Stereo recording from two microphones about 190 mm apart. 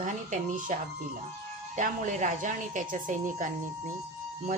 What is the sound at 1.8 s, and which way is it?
Speech, 40° right (ahead or behind).